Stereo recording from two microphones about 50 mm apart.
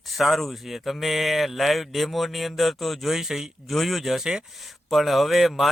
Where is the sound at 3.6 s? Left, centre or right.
Centre.